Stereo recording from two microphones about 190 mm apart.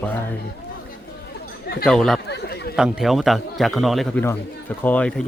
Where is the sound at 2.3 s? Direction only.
60° left (ahead or behind).